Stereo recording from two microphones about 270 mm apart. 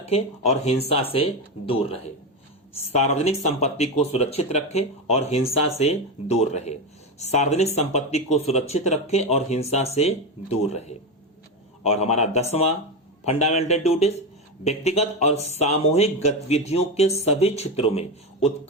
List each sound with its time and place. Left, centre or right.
0.0 s speech: left